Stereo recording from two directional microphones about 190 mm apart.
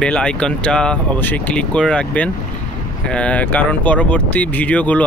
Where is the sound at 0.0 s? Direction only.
5° left (ahead or behind).